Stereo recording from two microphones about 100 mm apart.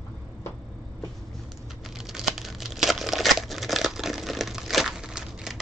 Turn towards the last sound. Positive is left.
turn(degrees=-5)  # may be behind; listen again after turning